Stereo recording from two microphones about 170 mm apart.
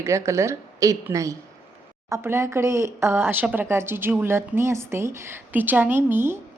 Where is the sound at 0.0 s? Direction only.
15° right (ahead or behind).